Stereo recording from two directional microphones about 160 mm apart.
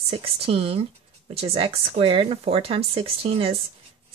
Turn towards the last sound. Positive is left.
turn(degrees=-35)  # may be behind; listen again after turning